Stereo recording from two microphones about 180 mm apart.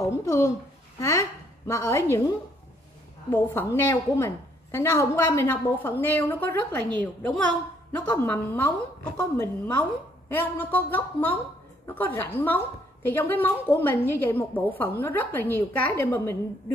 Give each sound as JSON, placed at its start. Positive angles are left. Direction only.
{"t": 0.0, "sound": "a sound", "side_deg": 15}
{"t": 1.7, "sound": "a woman's voice", "side_deg": 15}
{"t": 3.3, "sound": "a woman's voice", "side_deg": 10}